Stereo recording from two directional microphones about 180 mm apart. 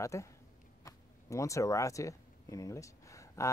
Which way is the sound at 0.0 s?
15° left (ahead or behind).